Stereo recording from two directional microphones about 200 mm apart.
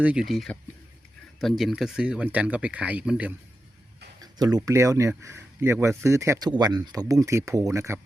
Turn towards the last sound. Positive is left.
turn(degrees=-15)  # may be behind; listen again after turning